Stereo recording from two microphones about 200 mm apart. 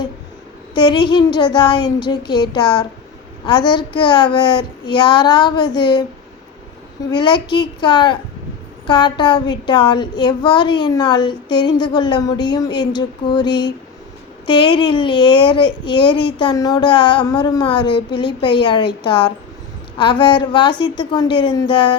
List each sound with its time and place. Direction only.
0.7 s speech: 20° left (ahead or behind)
7.1 s speech: 20° left (ahead or behind)